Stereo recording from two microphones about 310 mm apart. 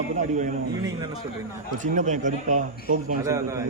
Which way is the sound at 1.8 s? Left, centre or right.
Right.